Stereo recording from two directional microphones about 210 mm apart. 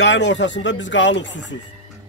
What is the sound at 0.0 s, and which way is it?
Speech, 55° left (ahead or behind).